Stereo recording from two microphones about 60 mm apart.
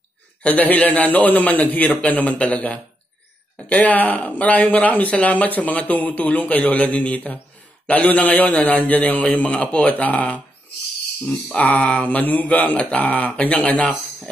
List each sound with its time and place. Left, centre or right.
0.4 s speech: left
11.2 s speech: centre